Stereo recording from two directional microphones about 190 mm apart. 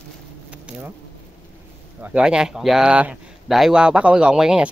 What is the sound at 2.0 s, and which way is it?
Speech, 5° right (ahead or behind).